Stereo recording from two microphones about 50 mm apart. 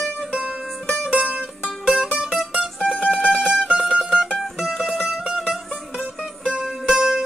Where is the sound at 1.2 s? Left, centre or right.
Right.